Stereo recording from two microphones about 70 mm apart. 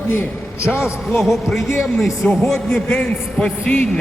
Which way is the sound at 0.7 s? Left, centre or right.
Centre.